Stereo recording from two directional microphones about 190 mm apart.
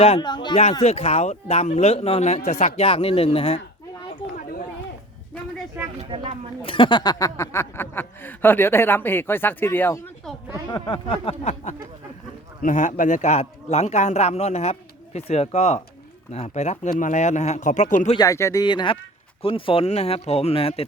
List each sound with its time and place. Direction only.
0.0 s speech: 25° left (ahead or behind)
0.6 s a man's voice: 35° left (ahead or behind)
6.0 s a sound: 30° right (ahead or behind)
6.6 s speech: 25° left (ahead or behind); by 10.3 s 10° left (ahead or behind)
10.7 s a man's voice: 25° left (ahead or behind); by 18.1 s 40° left (ahead or behind)
18.1 s a man's voice: 20° left (ahead or behind)